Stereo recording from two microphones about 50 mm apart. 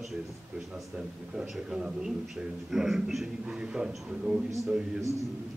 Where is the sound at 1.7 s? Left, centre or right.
Centre.